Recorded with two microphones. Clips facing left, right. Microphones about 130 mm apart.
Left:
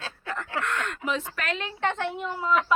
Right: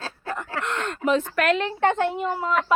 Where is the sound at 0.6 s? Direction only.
25° right (ahead or behind).